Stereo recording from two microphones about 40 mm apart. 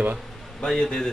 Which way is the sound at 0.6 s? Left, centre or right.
Centre.